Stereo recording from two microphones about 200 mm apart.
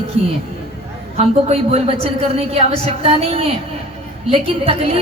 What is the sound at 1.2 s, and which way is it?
A woman's voice, 30° right (ahead or behind).